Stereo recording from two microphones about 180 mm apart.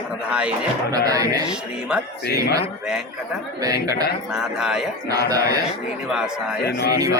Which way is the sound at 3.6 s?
20° right (ahead or behind).